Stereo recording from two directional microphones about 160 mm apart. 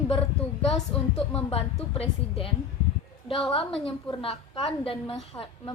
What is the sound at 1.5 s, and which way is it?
Speech, 35° left (ahead or behind).